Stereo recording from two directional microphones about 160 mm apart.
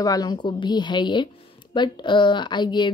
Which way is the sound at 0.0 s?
25° left (ahead or behind).